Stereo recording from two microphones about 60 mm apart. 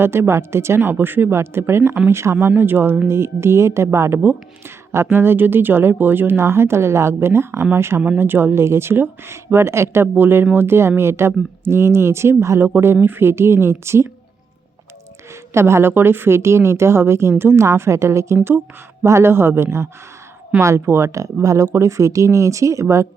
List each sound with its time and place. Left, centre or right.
0.0 s speech: right
4.2 s speech: right
15.5 s speech: right
17.7 s speech: right